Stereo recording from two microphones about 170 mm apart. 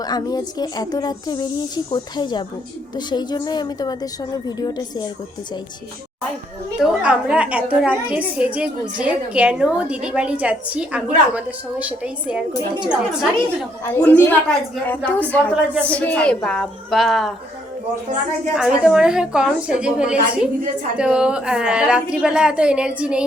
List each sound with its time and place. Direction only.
0.0 s speech: 25° left (ahead or behind)
6.7 s a woman's voice: 5° right (ahead or behind)
13.8 s a woman's voice: 10° left (ahead or behind)
18.5 s a woman's voice: 5° right (ahead or behind)